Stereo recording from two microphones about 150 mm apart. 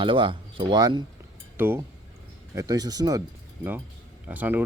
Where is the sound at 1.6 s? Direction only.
15° right (ahead or behind).